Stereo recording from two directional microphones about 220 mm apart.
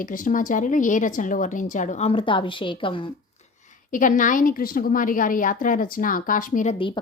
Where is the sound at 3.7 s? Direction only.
35° left (ahead or behind).